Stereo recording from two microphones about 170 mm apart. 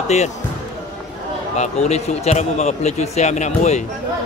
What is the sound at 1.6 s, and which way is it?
Speech, 40° left (ahead or behind).